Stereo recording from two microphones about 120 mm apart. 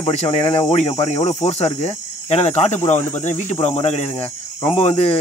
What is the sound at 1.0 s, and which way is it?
Cricket, 55° left (ahead or behind).